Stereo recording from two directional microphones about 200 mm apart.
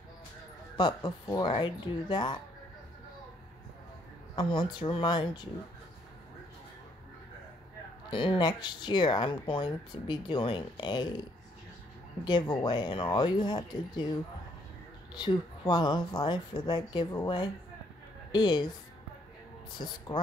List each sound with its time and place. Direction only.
0.7 s speech: 20° left (ahead or behind)
4.4 s speech: 25° left (ahead or behind)
8.1 s speech: 25° left (ahead or behind)
12.3 s speech: 20° left (ahead or behind)
15.1 s speech: 20° left (ahead or behind)